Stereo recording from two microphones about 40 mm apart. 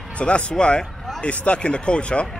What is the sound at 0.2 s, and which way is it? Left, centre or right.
Speech, left.